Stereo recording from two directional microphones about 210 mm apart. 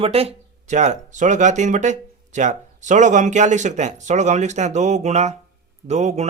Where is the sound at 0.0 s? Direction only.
30° right (ahead or behind).